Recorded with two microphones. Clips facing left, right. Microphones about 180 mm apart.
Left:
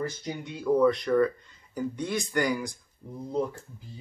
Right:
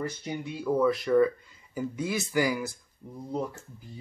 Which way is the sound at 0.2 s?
5° right (ahead or behind).